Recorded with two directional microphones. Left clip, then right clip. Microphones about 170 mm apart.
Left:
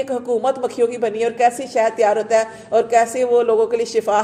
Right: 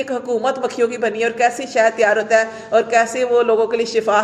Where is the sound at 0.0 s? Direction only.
45° left (ahead or behind).